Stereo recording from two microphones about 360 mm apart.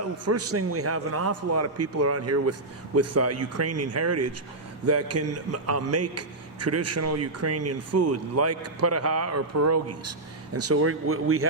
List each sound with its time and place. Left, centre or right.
0.0 s a man's voice: right